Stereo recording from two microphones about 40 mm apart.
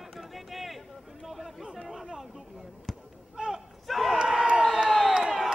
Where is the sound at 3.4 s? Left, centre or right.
Centre.